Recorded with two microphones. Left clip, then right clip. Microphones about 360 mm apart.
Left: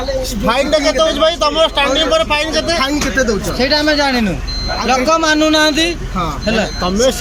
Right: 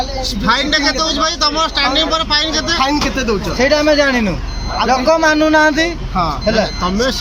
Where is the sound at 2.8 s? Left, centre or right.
Centre.